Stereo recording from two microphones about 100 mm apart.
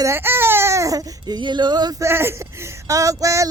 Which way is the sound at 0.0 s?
25° right (ahead or behind).